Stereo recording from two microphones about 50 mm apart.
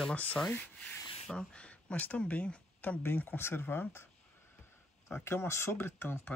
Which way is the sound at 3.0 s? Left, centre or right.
Left.